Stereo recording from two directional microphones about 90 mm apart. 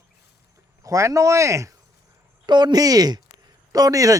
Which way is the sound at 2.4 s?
55° right (ahead or behind).